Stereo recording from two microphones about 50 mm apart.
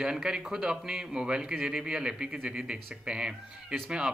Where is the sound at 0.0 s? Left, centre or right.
Centre.